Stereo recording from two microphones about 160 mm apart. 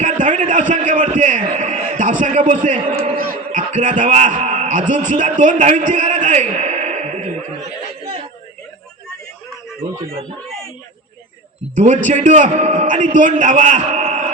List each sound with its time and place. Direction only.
0.0 s a sound: 50° right (ahead or behind)
3.5 s a man's voice: 50° right (ahead or behind)
11.7 s a man's voice: 50° right (ahead or behind)